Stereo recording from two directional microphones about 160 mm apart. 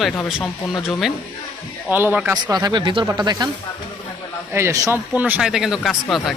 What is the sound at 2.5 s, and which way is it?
Speech, 25° right (ahead or behind).